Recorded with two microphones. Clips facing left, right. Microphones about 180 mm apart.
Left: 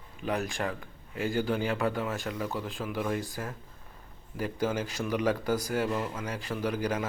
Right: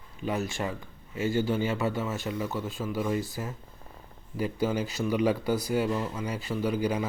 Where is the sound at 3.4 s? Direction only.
5° right (ahead or behind).